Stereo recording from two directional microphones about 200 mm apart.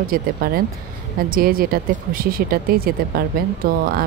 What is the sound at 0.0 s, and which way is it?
Speech, 45° right (ahead or behind).